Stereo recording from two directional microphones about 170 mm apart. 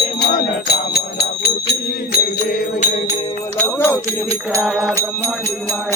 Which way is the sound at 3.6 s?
15° left (ahead or behind).